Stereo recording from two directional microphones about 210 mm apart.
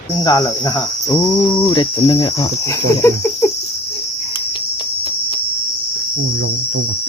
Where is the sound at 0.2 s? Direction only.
20° left (ahead or behind).